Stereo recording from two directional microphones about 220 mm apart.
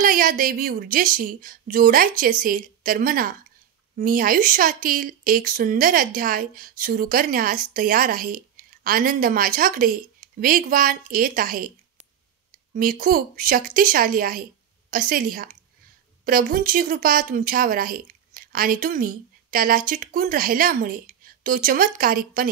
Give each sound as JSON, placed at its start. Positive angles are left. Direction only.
{"t": 0.0, "sound": "speech", "side_deg": -40}
{"t": 12.7, "sound": "speech", "side_deg": -40}